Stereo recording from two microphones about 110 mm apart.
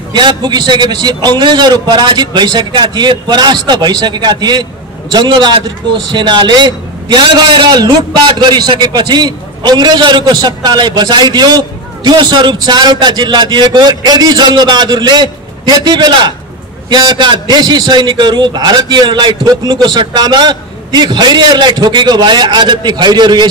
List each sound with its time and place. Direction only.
0.1 s a man's voice: 40° right (ahead or behind)